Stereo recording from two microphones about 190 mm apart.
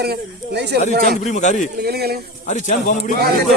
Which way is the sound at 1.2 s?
40° left (ahead or behind).